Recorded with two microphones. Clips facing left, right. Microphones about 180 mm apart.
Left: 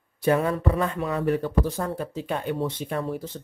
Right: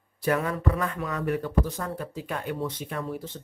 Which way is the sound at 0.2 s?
30° left (ahead or behind).